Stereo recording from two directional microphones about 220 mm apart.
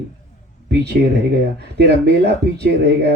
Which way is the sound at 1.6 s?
50° right (ahead or behind).